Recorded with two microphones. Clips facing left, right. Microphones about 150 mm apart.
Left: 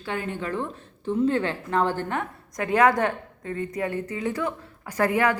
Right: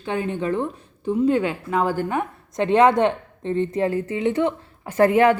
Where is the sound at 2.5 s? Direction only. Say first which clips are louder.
Right 4 dB; 25° right (ahead or behind).